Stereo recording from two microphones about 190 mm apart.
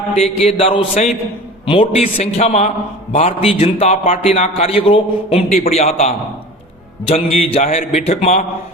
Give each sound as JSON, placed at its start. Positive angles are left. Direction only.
{"t": 0.1, "sound": "a man's voice", "side_deg": 35}
{"t": 7.1, "sound": "a man's voice", "side_deg": 30}